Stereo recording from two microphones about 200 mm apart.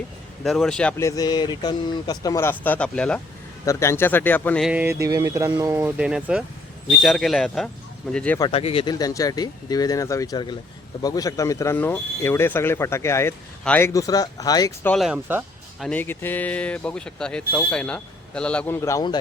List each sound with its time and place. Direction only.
0.4 s speech: centre (ahead or behind)
4.7 s speech: 10° right (ahead or behind); by 8.4 s 5° left (ahead or behind)
8.4 s speech: 25° left (ahead or behind)
14.9 s speech: 5° right (ahead or behind)
15.9 s speech: 10° left (ahead or behind)